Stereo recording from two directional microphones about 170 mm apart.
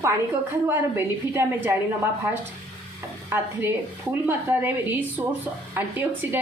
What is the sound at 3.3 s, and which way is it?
Speech, 10° right (ahead or behind).